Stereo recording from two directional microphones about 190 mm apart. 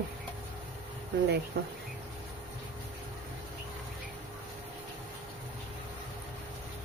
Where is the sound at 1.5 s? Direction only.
60° right (ahead or behind).